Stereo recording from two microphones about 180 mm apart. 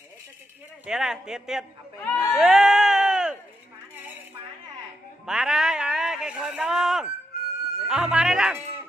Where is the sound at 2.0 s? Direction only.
15° left (ahead or behind).